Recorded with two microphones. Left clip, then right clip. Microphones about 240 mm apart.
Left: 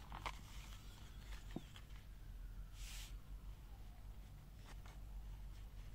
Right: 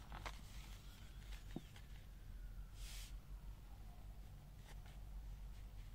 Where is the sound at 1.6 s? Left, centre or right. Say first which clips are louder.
Left 1 dB; left.